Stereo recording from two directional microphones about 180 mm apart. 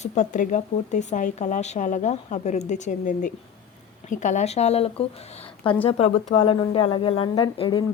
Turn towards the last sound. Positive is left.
turn(degrees=25)  # may be behind; listen again after turning